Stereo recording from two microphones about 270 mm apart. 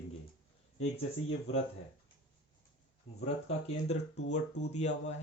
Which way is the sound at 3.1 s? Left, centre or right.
Left.